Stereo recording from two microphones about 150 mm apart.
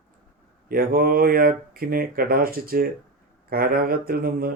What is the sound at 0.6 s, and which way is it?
Speech, 75° right (ahead or behind).